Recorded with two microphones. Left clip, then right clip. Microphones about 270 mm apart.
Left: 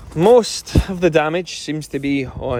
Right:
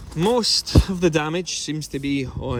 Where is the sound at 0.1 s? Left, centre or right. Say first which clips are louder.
Left 7 dB; centre.